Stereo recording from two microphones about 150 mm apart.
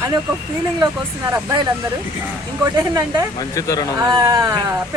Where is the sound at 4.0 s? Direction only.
25° right (ahead or behind).